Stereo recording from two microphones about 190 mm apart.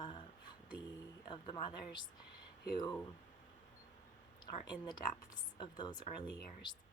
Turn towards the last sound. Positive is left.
turn(degrees=25)  # may be behind; listen again after turning